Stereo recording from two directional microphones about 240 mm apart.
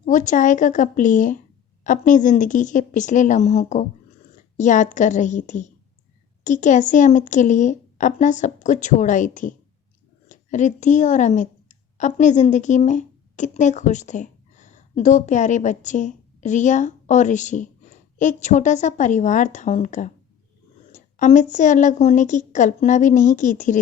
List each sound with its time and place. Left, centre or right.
0.0 s a woman's voice: left